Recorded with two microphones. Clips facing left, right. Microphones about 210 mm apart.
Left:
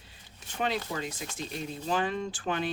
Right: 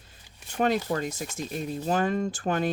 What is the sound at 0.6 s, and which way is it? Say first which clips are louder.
Speech: right 6 dB; 45° right (ahead or behind).